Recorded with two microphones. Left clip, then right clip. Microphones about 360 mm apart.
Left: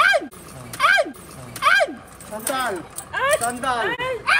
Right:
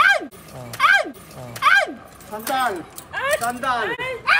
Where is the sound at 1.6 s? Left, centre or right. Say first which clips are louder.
Right 1 dB; centre.